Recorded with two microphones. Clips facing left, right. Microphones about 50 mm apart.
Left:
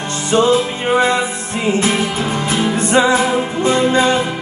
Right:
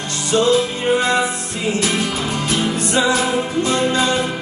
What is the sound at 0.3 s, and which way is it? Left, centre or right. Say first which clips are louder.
Music: left 2 dB; left.